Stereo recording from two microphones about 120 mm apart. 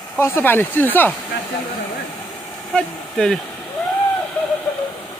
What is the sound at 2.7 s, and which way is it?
Speech, 5° left (ahead or behind).